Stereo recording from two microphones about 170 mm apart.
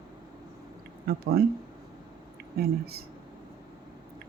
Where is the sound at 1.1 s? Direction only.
65° right (ahead or behind).